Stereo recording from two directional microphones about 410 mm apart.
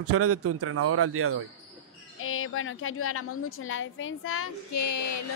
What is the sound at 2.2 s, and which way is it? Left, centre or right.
A woman's voice, left.